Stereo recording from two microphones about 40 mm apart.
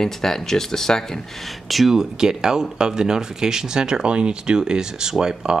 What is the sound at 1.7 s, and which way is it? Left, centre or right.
Speech, centre.